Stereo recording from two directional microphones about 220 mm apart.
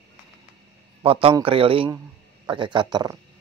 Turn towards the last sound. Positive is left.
turn(degrees=-20)  # may be behind; listen again after turning